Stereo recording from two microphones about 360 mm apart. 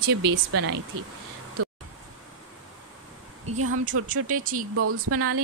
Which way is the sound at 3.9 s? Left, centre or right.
Right.